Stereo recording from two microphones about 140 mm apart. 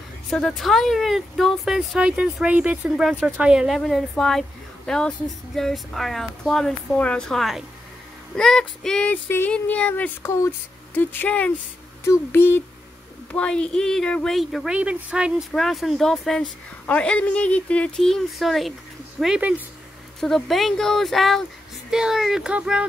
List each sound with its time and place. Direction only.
0.3 s speech: 5° left (ahead or behind)